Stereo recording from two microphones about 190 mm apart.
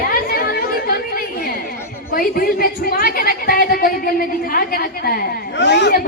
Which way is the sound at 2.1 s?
50° left (ahead or behind).